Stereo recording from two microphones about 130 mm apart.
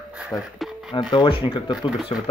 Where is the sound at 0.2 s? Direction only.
Centre (ahead or behind).